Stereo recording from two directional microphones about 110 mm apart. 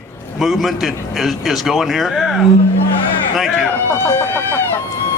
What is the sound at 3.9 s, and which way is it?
Speech, 20° left (ahead or behind).